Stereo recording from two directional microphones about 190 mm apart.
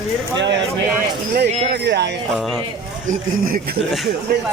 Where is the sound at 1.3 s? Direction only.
60° right (ahead or behind).